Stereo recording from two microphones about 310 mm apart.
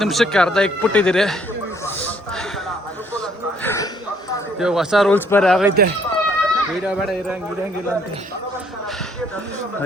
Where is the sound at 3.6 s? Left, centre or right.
Centre.